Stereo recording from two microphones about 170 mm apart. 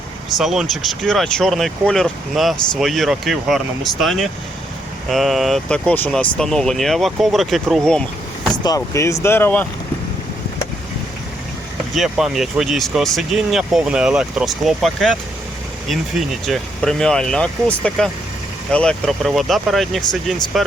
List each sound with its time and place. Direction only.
0.3 s speech: centre (ahead or behind)
8.6 s speech: 20° left (ahead or behind)
11.9 s speech: centre (ahead or behind)